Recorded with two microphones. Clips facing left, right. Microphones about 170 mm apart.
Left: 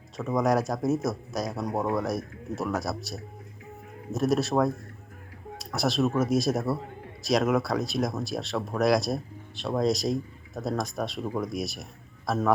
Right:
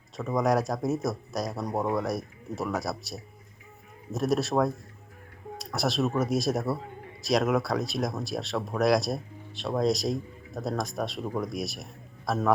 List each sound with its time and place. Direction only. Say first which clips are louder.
0.2 s speech: left 1 dB; centre (ahead or behind)